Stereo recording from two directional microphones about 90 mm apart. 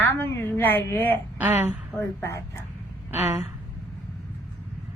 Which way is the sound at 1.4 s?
25° right (ahead or behind).